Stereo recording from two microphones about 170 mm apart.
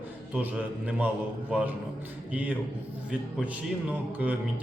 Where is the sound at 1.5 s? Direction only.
10° right (ahead or behind).